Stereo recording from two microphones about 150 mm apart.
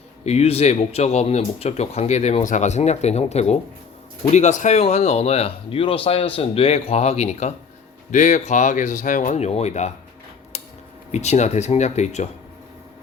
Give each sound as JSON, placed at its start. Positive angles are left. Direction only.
{"t": 0.3, "sound": "speech", "side_deg": 45}
{"t": 10.5, "sound": "a sound", "side_deg": 45}
{"t": 11.1, "sound": "speech", "side_deg": 50}